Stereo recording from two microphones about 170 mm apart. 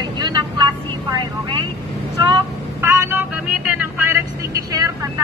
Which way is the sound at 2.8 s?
15° right (ahead or behind).